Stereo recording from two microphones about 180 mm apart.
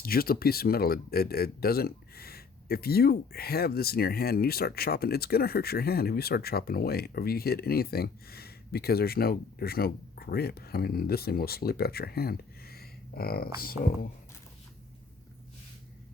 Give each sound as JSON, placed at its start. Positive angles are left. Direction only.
{"t": 0.0, "sound": "speech", "side_deg": 55}